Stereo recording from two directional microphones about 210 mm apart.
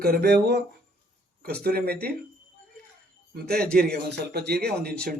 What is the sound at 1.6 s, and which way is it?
Speech, 50° right (ahead or behind).